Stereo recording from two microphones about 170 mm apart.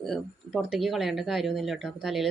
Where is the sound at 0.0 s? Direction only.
Centre (ahead or behind).